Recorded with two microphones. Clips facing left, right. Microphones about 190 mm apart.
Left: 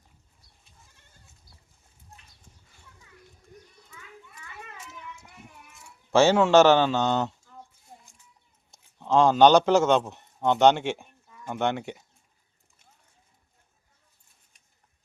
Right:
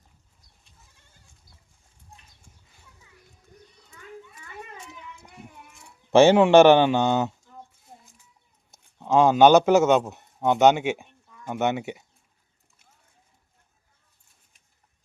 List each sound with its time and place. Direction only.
6.1 s a man's voice: 15° right (ahead or behind)
8.7 s a man's voice: 10° right (ahead or behind)